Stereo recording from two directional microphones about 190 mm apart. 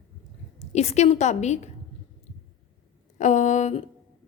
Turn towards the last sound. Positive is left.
turn(degrees=40)  # may be behind; listen again after turning